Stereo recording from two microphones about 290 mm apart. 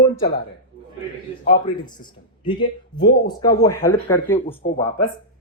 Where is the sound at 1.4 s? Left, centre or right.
Centre.